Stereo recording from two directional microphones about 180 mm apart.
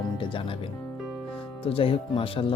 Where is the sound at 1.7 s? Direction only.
30° left (ahead or behind).